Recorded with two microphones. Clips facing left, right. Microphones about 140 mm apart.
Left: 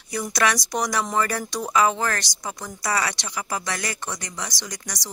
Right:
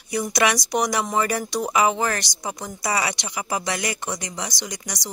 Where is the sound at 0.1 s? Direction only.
15° right (ahead or behind).